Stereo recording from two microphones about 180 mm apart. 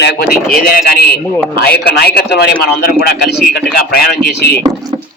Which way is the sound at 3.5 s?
60° left (ahead or behind).